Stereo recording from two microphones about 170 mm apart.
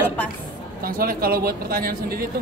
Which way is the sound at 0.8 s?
60° right (ahead or behind).